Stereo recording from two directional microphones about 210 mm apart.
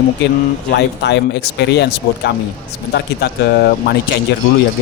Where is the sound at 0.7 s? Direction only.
55° left (ahead or behind).